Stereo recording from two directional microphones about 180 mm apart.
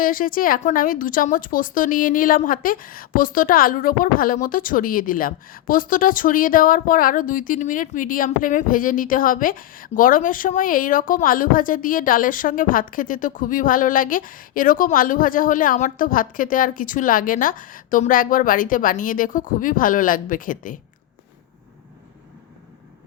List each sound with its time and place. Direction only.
0.0 s a woman's voice: 50° left (ahead or behind)